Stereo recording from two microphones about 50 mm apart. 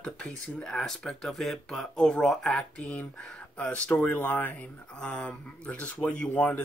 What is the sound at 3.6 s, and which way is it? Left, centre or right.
Speech, left.